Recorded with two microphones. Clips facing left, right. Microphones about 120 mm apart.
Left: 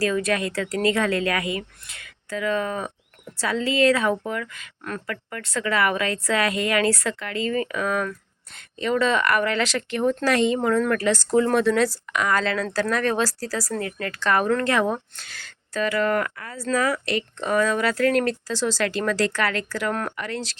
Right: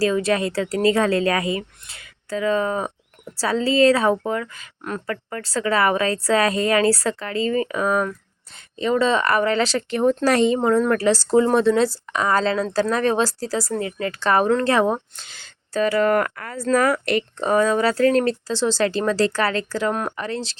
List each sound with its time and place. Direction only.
0.0 s a woman's voice: 30° right (ahead or behind)
4.8 s speech: 20° right (ahead or behind)
5.0 s a woman's voice: 35° right (ahead or behind); by 17.2 s 50° right (ahead or behind)
17.4 s a woman's voice: 30° right (ahead or behind)
20.1 s speech: 30° right (ahead or behind)